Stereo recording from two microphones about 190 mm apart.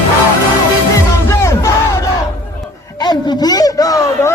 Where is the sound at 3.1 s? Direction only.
20° left (ahead or behind).